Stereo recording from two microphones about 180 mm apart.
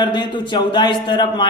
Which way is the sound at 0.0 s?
25° left (ahead or behind).